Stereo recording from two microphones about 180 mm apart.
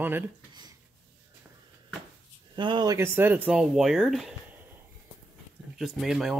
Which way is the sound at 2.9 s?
15° right (ahead or behind).